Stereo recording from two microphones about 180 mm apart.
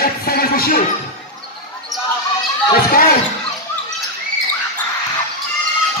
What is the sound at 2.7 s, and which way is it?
Speech, 55° left (ahead or behind).